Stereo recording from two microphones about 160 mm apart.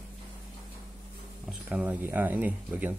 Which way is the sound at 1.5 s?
5° right (ahead or behind).